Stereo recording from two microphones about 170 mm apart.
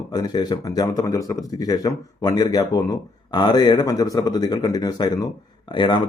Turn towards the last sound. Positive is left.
turn(degrees=30)  # may be behind; listen again after turning